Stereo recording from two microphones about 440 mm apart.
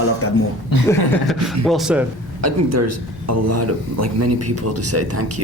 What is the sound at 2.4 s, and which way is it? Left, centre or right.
A man's voice, right.